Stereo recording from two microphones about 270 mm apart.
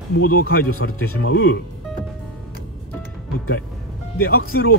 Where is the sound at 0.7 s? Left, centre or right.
Left.